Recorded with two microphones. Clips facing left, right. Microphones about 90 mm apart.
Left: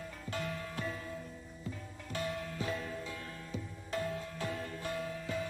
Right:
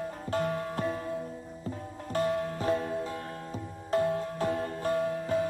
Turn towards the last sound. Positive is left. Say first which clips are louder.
# right 10 dB
turn(degrees=-45)  # may be behind; listen again after turning